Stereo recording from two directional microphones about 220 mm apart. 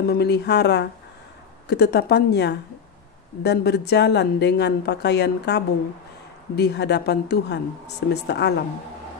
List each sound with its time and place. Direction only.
0.1 s a woman's voice: 45° left (ahead or behind)